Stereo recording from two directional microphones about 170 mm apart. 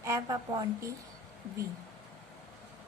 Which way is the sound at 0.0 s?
20° right (ahead or behind).